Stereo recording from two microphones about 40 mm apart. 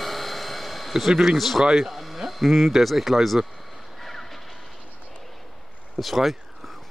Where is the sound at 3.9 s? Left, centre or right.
Centre.